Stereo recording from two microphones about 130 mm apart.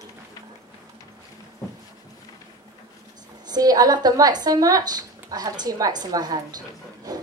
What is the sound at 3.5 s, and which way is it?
A woman's voice, 30° right (ahead or behind).